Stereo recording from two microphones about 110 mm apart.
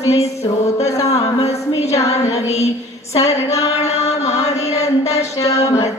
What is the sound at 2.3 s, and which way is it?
Mantra, 80° left.